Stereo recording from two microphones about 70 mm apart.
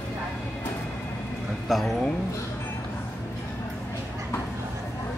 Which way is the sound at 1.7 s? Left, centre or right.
Centre.